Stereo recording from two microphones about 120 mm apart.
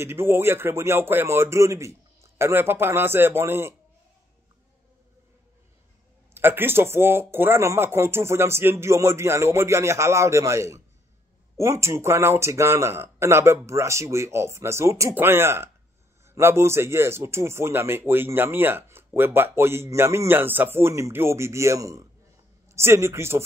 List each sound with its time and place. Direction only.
0.0 s a man's voice: 20° right (ahead or behind)
6.3 s a man's voice: 20° right (ahead or behind)